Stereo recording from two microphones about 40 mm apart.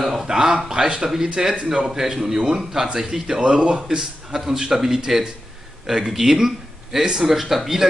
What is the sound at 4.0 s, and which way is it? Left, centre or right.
Speech, centre.